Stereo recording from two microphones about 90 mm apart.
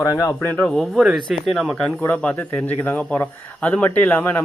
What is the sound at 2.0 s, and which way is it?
A man's voice, 20° left (ahead or behind).